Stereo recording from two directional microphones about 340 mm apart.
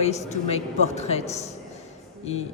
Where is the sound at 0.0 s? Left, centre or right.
Centre.